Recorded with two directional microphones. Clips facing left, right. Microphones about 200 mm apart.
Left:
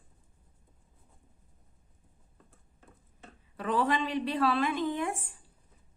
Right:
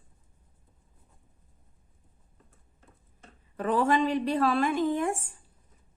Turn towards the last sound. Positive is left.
turn(degrees=-45)  # may be behind; listen again after turning